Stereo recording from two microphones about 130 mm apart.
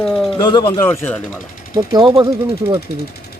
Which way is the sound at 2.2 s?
20° right (ahead or behind).